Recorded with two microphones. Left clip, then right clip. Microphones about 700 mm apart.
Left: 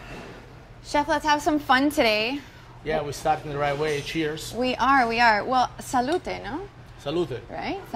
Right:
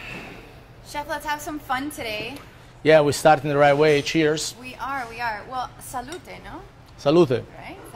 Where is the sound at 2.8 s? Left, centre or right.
Right.